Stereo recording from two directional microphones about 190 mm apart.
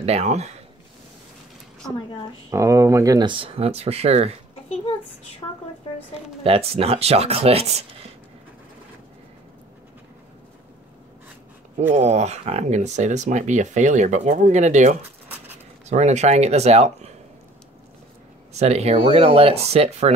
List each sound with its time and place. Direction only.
0.0 s speech: 35° right (ahead or behind)
2.5 s speech: 15° right (ahead or behind); by 4.3 s 35° right (ahead or behind)
5.4 s a woman's voice: 15° left (ahead or behind)
6.4 s speech: 30° right (ahead or behind)
11.9 s speech: 35° right (ahead or behind)
18.5 s speech: 35° right (ahead or behind)